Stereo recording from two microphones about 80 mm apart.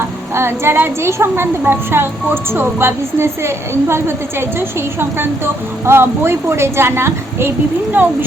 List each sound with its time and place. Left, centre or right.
0.3 s a woman's voice: right
5.8 s a woman's voice: right